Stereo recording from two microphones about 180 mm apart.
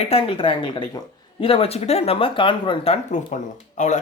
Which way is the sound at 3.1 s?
45° left (ahead or behind).